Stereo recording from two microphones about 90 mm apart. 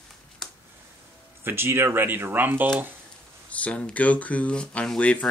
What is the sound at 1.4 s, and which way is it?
Speech, 25° right (ahead or behind).